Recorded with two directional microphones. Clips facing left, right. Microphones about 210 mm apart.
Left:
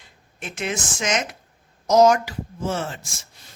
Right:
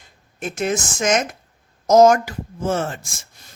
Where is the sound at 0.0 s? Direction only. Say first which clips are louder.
Right 7 dB; 45° right (ahead or behind).